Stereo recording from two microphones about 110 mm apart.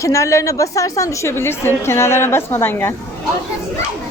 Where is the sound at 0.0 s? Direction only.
30° left (ahead or behind).